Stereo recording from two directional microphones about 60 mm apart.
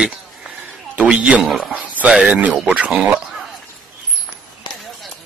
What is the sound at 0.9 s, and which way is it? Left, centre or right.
A man's voice, right.